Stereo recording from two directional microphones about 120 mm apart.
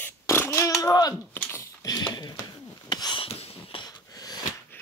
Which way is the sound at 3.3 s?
55° left (ahead or behind).